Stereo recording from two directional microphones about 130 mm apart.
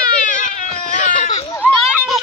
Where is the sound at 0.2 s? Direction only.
90° left.